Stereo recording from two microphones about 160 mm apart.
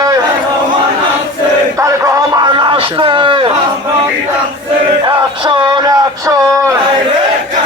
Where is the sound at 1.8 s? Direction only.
20° right (ahead or behind).